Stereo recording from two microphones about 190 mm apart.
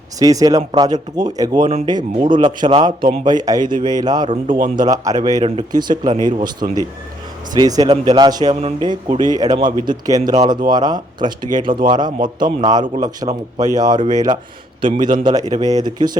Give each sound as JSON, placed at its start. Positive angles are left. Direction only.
{"t": 0.2, "sound": "a man's voice", "side_deg": -20}
{"t": 4.3, "sound": "a man's voice", "side_deg": -40}
{"t": 4.8, "sound": "a man's voice", "side_deg": -20}